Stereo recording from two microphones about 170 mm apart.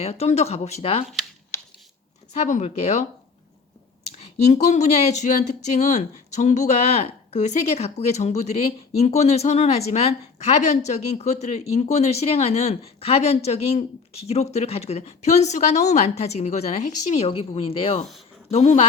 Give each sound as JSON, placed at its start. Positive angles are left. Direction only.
{"t": 0.0, "sound": "speech", "side_deg": 40}
{"t": 2.3, "sound": "speech", "side_deg": 40}
{"t": 4.2, "sound": "speech", "side_deg": 40}